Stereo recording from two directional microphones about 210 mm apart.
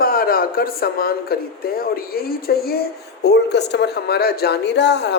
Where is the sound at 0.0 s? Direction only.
45° left (ahead or behind).